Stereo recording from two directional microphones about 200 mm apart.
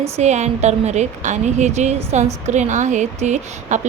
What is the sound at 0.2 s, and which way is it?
A woman's voice, 35° right (ahead or behind).